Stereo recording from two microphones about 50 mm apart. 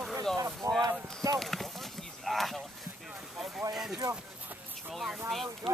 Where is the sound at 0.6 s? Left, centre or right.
Right.